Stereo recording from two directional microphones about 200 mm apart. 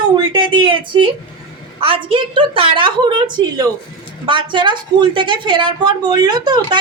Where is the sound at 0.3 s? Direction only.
25° right (ahead or behind).